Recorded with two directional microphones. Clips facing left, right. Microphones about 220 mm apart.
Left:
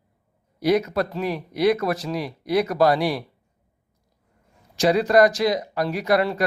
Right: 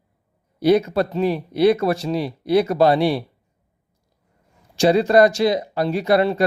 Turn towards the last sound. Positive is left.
turn(degrees=-25)  # may be behind; listen again after turning